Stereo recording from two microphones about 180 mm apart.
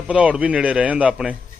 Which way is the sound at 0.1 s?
5° right (ahead or behind).